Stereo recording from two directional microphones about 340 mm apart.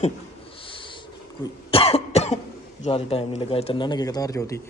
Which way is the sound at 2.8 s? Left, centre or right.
Centre.